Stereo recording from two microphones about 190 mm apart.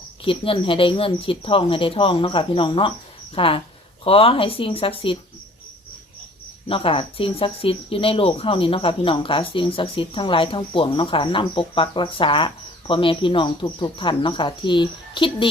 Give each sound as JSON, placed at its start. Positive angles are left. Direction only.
{"t": 0.3, "sound": "speech", "side_deg": 30}
{"t": 6.7, "sound": "speech", "side_deg": 30}